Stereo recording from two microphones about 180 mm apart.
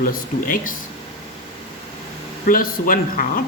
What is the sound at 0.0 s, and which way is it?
Speech, 50° left (ahead or behind).